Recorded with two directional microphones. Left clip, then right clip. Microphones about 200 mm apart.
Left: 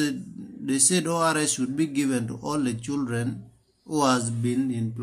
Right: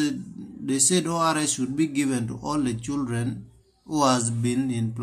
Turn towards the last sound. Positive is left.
turn(degrees=-15)  # may be behind; listen again after turning